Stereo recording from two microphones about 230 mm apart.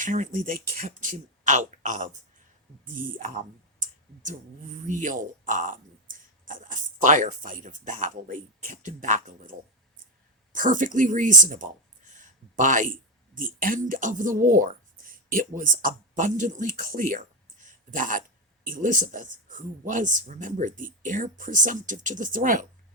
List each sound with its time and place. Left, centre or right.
0.0 s speech: right
3.2 s speech: right
10.5 s speech: right